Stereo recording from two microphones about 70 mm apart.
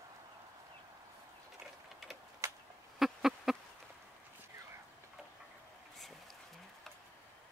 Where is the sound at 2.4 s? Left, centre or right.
Right.